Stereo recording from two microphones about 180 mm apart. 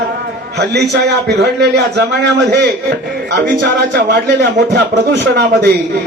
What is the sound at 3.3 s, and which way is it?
Speech, 70° right (ahead or behind).